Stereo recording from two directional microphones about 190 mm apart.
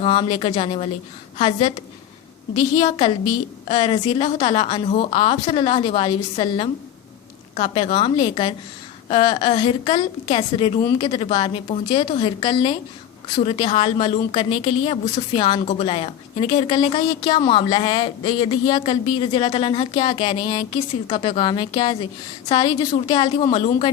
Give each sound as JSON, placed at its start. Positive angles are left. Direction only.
{"t": 0.0, "sound": "a woman's voice", "side_deg": 25}